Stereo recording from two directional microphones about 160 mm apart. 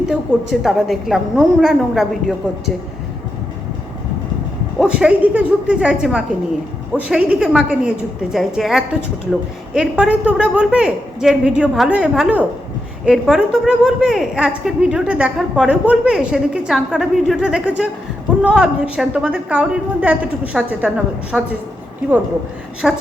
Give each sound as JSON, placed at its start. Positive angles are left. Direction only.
{"t": 0.1, "sound": "a woman's voice", "side_deg": 0}
{"t": 4.8, "sound": "a woman's voice", "side_deg": -5}
{"t": 22.8, "sound": "a woman's voice", "side_deg": 0}